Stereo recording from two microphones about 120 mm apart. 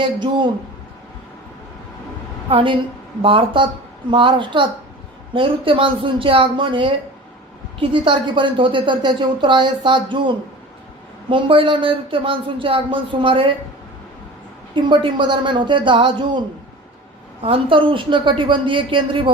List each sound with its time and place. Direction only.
0.0 s a woman's voice: 40° right (ahead or behind)
2.5 s a woman's voice: 45° right (ahead or behind)
14.8 s a woman's voice: 40° right (ahead or behind)
17.4 s a woman's voice: 50° right (ahead or behind)